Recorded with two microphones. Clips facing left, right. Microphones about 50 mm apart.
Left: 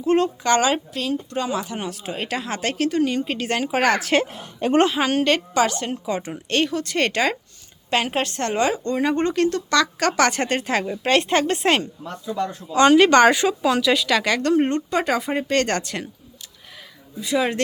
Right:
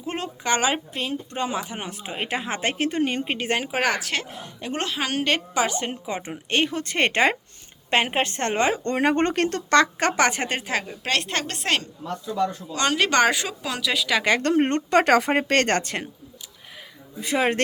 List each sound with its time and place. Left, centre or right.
0.0 s speech: centre
4.3 s a woman's voice: left
4.9 s speech: centre
5.6 s speech: right
8.8 s speech: right; by 14.2 s centre
14.3 s speech: right
14.8 s speech: right
17.2 s speech: right